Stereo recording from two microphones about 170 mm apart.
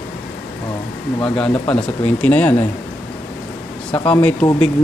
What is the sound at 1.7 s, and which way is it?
Speech, 10° left (ahead or behind).